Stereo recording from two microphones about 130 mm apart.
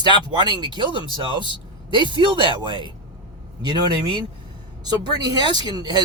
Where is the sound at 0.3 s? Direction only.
35° right (ahead or behind).